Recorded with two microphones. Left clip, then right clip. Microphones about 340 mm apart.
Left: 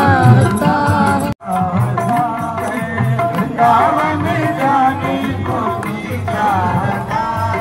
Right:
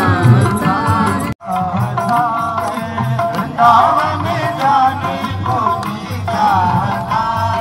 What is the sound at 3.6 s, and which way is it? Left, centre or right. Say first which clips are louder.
Music: right 2 dB; centre.